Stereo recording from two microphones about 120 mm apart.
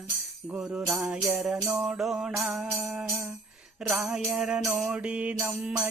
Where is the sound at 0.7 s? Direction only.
5° right (ahead or behind).